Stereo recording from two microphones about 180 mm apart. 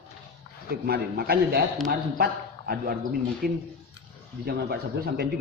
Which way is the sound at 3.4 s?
55° right (ahead or behind).